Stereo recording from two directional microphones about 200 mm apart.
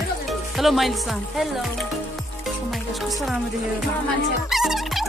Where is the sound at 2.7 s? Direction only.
Centre (ahead or behind).